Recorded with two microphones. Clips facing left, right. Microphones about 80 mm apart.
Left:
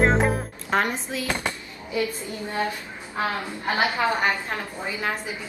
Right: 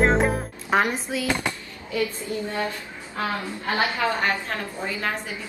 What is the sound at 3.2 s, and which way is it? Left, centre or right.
A woman's voice, left.